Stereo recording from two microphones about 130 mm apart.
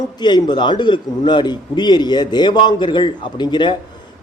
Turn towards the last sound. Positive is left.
turn(degrees=35)  # may be behind; listen again after turning